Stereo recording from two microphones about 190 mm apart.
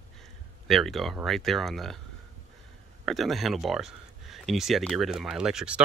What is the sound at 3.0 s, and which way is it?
Speech, centre (ahead or behind).